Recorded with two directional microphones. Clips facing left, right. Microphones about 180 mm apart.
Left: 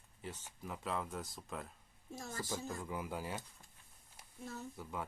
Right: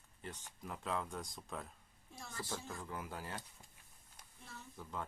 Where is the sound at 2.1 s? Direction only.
45° left (ahead or behind).